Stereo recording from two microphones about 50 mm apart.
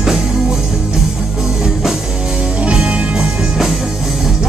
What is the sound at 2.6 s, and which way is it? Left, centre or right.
Music, right.